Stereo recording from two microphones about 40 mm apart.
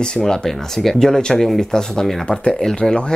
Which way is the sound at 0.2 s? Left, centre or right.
Centre.